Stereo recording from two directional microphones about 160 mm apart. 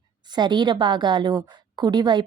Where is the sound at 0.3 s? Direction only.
30° right (ahead or behind).